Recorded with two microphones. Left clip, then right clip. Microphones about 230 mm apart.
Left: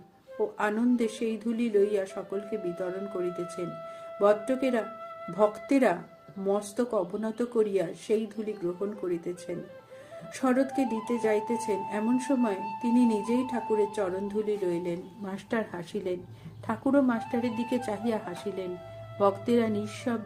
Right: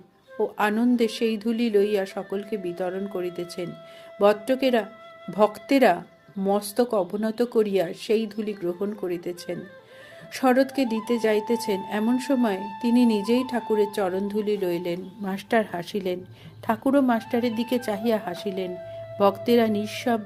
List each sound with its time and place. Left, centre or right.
0.5 s a woman's voice: right